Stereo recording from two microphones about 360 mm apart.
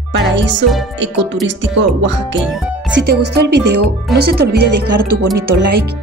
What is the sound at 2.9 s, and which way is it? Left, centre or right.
Speech, right.